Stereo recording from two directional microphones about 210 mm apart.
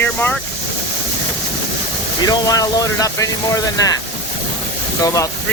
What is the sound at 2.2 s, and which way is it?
Speech, 15° left (ahead or behind).